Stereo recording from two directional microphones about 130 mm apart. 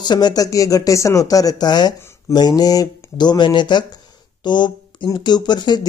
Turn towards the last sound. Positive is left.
turn(degrees=35)  # may be behind; listen again after turning